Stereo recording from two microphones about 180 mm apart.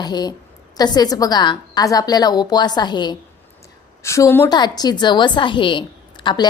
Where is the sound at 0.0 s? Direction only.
25° left (ahead or behind).